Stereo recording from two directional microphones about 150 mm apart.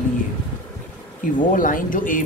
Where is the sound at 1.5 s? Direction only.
60° left (ahead or behind).